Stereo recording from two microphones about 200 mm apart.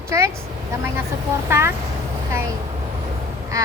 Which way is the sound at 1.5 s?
15° right (ahead or behind).